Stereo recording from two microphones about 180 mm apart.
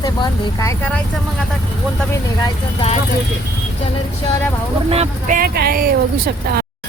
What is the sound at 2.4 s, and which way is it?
Speech, 30° left (ahead or behind).